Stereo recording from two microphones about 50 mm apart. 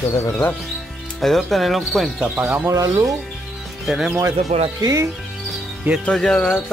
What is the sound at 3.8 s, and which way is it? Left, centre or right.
Speech, centre.